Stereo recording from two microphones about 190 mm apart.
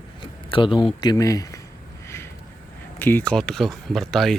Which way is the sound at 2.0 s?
15° left (ahead or behind).